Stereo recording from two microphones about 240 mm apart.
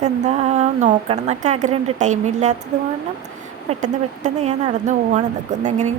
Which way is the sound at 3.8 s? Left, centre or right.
Right.